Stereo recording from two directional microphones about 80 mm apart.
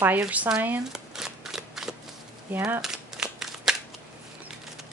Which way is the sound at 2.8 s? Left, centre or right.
Centre.